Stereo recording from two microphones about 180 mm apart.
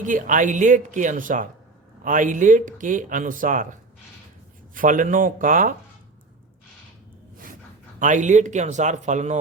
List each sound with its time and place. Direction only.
0.0 s speech: 45° right (ahead or behind)
7.9 s speech: 45° right (ahead or behind)